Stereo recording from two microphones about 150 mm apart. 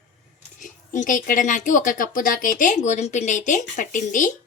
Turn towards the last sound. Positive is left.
turn(degrees=60)  # may be behind; listen again after turning